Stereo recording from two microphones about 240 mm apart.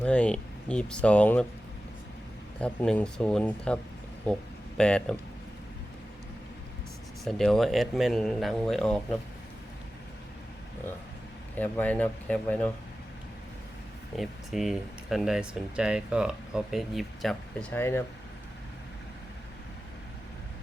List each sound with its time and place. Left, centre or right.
0.0 s speech: centre
2.6 s speech: centre
4.8 s speech: centre
7.3 s speech: centre
11.5 s speech: centre
14.2 s speech: centre